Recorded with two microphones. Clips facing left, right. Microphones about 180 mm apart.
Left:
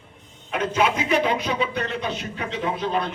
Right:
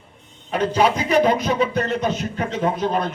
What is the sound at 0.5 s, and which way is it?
A man's voice, 35° right (ahead or behind).